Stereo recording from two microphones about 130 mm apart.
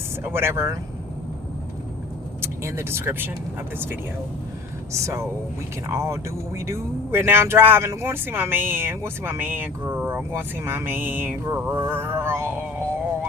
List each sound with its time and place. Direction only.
0.2 s speech: 20° right (ahead or behind)
2.4 s speech: 20° right (ahead or behind)
4.9 s speech: 25° right (ahead or behind)